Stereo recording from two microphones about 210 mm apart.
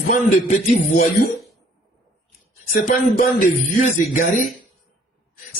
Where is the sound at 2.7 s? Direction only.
45° left (ahead or behind).